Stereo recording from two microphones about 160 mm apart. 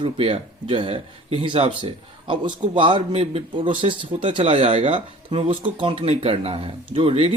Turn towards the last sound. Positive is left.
turn(degrees=-35)  # may be behind; listen again after turning